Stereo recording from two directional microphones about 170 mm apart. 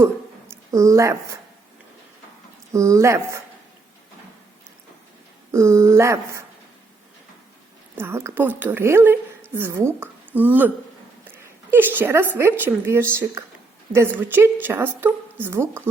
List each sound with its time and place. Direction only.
0.0 s a sound: 15° right (ahead or behind)
2.7 s a woman's voice: 15° right (ahead or behind)
5.5 s a woman's voice: 15° right (ahead or behind)
7.9 s a woman's voice: 15° right (ahead or behind)